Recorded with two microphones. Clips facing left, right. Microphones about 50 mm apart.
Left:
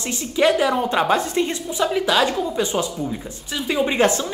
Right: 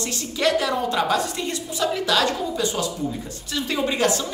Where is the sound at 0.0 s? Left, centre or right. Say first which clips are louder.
Left 4 dB; left.